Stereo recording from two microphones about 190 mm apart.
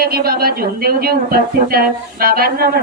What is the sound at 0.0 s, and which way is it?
A woman's voice, 55° right (ahead or behind).